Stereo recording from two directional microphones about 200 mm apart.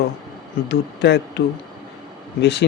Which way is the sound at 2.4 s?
60° left (ahead or behind).